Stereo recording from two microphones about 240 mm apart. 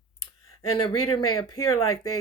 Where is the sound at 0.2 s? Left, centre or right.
Left.